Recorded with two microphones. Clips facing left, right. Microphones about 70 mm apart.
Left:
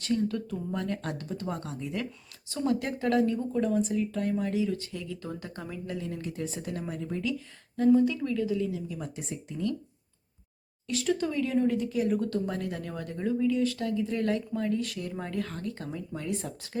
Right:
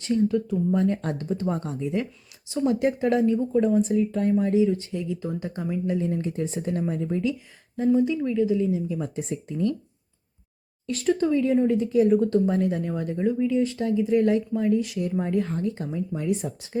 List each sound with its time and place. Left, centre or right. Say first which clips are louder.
0.0 s speech: right 6 dB; centre
6.0 s speech: right 8 dB; right
10.8 s speech: right 6 dB; right; by 16.7 s centre